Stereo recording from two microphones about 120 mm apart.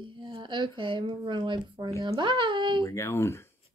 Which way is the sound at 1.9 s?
30° right (ahead or behind).